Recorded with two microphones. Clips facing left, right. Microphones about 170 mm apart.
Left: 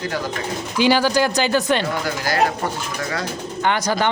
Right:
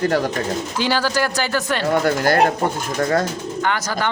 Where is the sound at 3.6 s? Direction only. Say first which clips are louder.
Left 3 dB; 20° left (ahead or behind).